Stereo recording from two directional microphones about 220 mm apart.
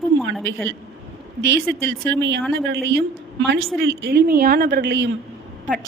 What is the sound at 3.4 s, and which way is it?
A woman's voice, 45° right (ahead or behind).